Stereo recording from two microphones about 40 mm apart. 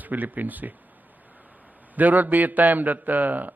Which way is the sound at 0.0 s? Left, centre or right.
Right.